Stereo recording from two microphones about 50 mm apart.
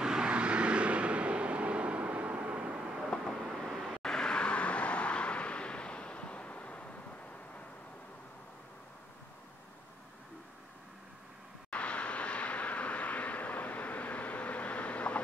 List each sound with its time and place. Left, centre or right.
0.0 s vehicle: centre
3.1 s vehicle: centre
3.6 s vehicle: centre
4.0 s vehicle: centre
11.7 s vehicle: left